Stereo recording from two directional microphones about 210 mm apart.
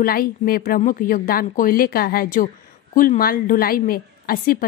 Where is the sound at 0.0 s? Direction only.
45° left (ahead or behind).